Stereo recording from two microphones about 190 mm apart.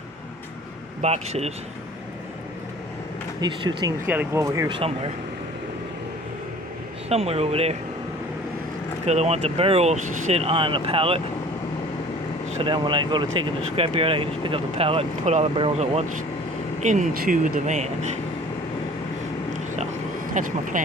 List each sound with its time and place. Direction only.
1.0 s speech: 35° right (ahead or behind)
3.4 s speech: 20° right (ahead or behind)
4.0 s speech: 10° right (ahead or behind)
7.1 s speech: 30° right (ahead or behind)
9.0 s speech: 35° right (ahead or behind)
12.6 s speech: 25° right (ahead or behind)
16.8 s speech: 40° right (ahead or behind)
20.3 s speech: 45° right (ahead or behind)